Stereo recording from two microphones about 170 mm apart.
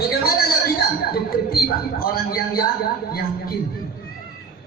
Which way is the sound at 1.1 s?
60° left (ahead or behind).